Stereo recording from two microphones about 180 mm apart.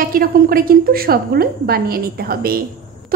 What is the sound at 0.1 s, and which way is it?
A woman's voice, 55° right (ahead or behind).